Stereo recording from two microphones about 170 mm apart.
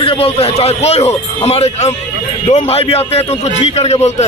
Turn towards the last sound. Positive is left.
turn(degrees=40)  # may be behind; listen again after turning